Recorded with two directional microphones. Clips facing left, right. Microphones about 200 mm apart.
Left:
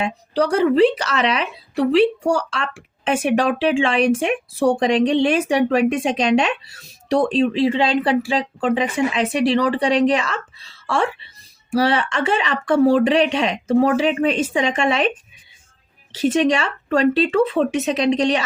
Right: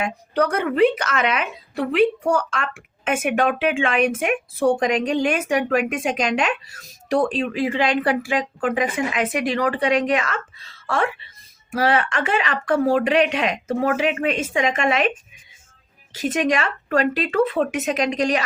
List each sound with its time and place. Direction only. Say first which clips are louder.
0.0 s speech: left 1 dB; 30° left (ahead or behind)
3.2 s speech: left 2 dB; 30° left (ahead or behind)
11.7 s speech: left 2 dB; 35° left (ahead or behind)
16.1 s speech: left 4 dB; 30° left (ahead or behind)